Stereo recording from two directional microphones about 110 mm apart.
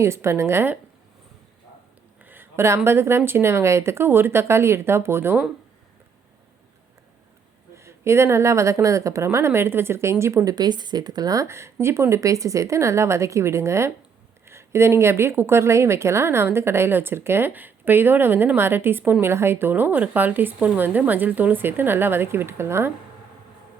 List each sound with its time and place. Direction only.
0.0 s a woman's voice: 25° right (ahead or behind)
2.2 s a woman's voice: 20° right (ahead or behind)
7.8 s a woman's voice: 25° right (ahead or behind)